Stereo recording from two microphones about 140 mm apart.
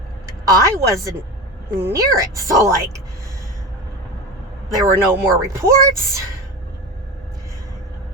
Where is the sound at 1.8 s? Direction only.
15° right (ahead or behind).